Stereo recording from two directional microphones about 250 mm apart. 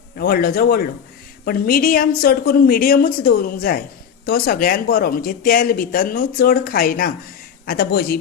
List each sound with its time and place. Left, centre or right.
0.2 s speech: left